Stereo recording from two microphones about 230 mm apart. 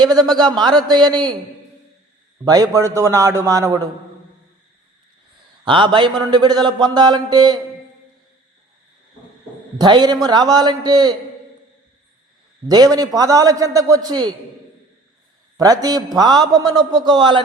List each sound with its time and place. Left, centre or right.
0.0 s a man's voice: centre
2.4 s a man's voice: centre
5.6 s speech: right
9.7 s a man's voice: centre
12.6 s a man's voice: centre
15.5 s a man's voice: centre